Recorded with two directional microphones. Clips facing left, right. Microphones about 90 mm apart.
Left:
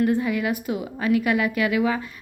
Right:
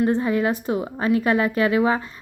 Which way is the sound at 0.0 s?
35° right (ahead or behind).